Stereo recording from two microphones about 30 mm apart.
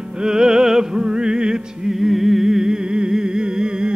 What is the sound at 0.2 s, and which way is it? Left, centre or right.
Music, centre.